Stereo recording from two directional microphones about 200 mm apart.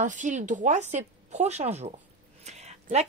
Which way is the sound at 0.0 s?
40° right (ahead or behind).